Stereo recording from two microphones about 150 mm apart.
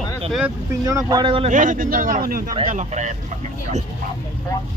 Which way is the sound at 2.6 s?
55° right (ahead or behind).